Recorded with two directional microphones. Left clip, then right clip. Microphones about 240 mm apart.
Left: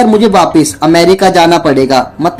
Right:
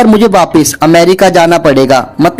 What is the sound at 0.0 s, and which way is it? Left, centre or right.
Speech, right.